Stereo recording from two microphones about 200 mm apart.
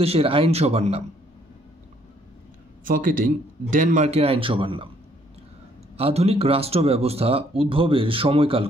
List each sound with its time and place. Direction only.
0.0 s speech: 30° right (ahead or behind)
2.8 s a man's voice: 45° right (ahead or behind); by 4.8 s 25° right (ahead or behind)
5.9 s speech: 30° right (ahead or behind)